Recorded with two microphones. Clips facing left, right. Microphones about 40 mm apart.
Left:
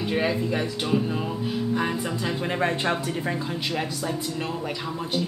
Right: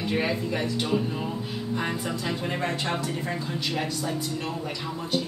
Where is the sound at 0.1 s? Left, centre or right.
Centre.